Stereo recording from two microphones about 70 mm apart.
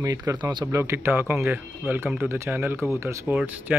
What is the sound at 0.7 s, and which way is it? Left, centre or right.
A man's voice, right.